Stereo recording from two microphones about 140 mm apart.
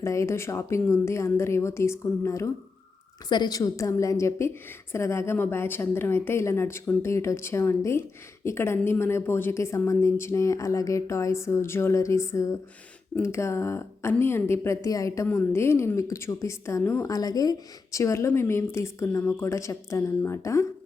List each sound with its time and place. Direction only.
0.0 s a woman's voice: 20° left (ahead or behind)
3.2 s a woman's voice: 30° left (ahead or behind)